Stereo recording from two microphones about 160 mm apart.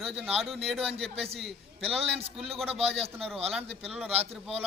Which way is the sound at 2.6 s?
40° right (ahead or behind).